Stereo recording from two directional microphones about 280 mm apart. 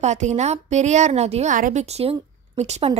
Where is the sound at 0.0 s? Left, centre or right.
Right.